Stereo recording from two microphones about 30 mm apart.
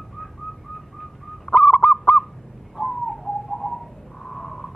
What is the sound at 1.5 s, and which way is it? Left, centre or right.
Goose, left.